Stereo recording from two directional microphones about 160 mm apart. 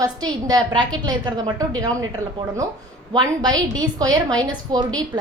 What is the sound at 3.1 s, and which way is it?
A woman's voice, 25° right (ahead or behind).